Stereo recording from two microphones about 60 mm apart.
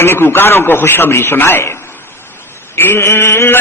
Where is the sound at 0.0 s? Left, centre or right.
Left.